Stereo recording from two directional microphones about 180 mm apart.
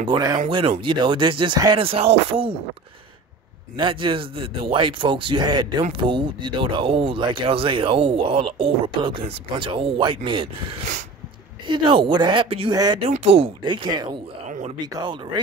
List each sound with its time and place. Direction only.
0.0 s speech: 25° right (ahead or behind)
3.8 s speech: 30° right (ahead or behind)
11.6 s speech: 25° right (ahead or behind)
13.0 s speech: 35° right (ahead or behind)